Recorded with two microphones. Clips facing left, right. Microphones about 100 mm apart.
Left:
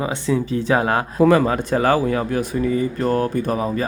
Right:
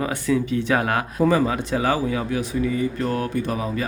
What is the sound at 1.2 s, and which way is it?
Speech, 65° left (ahead or behind).